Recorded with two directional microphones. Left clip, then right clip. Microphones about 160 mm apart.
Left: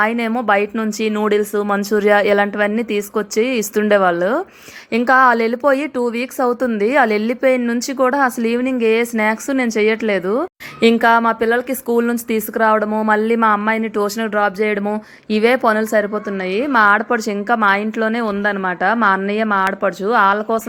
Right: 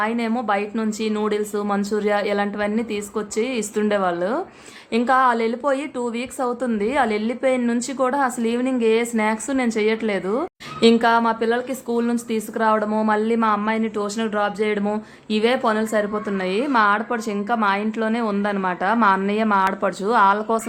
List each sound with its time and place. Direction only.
0.0 s speech: 35° left (ahead or behind)
4.9 s speech: 35° left (ahead or behind)
12.7 s speech: 25° left (ahead or behind)
16.1 s speech: 25° left (ahead or behind)